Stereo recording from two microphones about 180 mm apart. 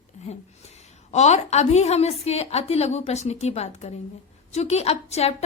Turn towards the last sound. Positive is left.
turn(degrees=35)  # may be behind; listen again after turning